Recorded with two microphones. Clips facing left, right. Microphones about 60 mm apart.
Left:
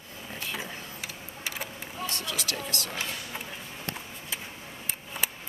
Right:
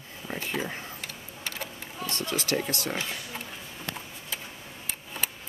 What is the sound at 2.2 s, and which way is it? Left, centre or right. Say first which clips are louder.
Speech: right 5 dB; right.